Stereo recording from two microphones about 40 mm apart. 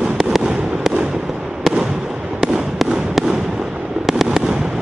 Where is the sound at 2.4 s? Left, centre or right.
Centre.